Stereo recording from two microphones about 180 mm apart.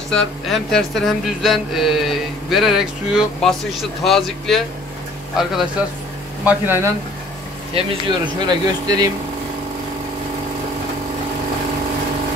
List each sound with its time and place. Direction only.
0.1 s a sound: 5° left (ahead or behind)
6.4 s speech: 10° right (ahead or behind)
8.4 s speech: 25° right (ahead or behind)